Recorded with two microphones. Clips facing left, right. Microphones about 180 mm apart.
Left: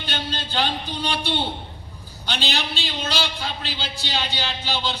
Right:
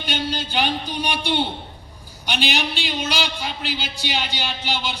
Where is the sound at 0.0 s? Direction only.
15° right (ahead or behind).